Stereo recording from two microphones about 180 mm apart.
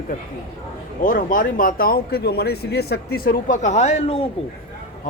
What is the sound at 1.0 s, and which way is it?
Speech, 50° left (ahead or behind).